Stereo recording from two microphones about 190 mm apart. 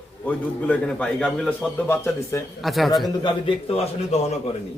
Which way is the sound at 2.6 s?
Centre (ahead or behind).